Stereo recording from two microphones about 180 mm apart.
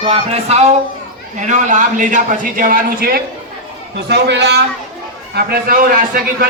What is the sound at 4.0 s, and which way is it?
Speech, 65° right (ahead or behind).